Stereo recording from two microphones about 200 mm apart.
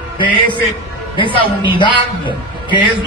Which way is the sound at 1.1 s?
25° left (ahead or behind).